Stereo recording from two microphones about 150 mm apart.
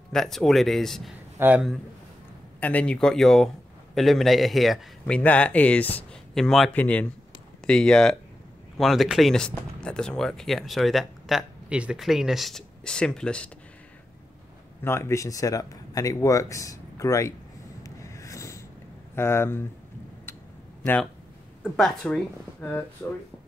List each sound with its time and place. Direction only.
0.1 s speech: centre (ahead or behind)
1.4 s a man's voice: 10° right (ahead or behind)
2.6 s speech: 10° left (ahead or behind)
14.8 s speech: 15° left (ahead or behind)
17.8 s rub: 20° left (ahead or behind)
19.1 s speech: 15° left (ahead or behind)
20.8 s speech: 10° left (ahead or behind)